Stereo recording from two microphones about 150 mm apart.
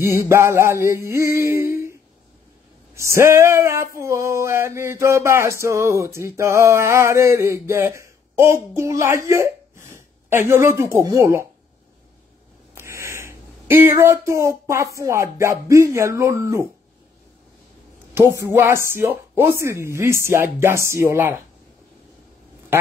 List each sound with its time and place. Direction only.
0.0 s male singing: 15° right (ahead or behind)
3.0 s male singing: 20° right (ahead or behind)
8.7 s a woman's voice: 20° right (ahead or behind)
12.7 s speech: 20° right (ahead or behind)
18.1 s male singing: 20° right (ahead or behind)